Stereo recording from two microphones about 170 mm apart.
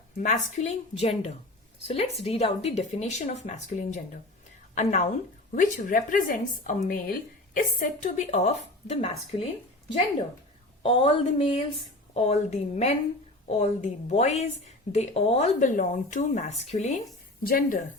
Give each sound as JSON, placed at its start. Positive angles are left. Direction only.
{"t": 0.2, "sound": "speech", "side_deg": 45}
{"t": 10.8, "sound": "speech", "side_deg": 40}
{"t": 17.4, "sound": "speech", "side_deg": 55}